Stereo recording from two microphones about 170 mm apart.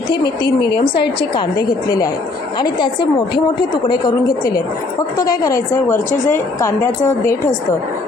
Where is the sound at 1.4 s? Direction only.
20° left (ahead or behind).